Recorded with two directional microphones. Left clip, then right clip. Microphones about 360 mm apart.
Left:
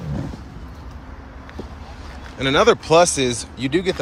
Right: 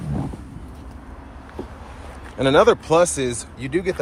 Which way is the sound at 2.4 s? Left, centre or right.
Centre.